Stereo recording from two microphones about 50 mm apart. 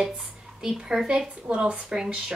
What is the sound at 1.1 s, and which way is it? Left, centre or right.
A woman's voice, centre.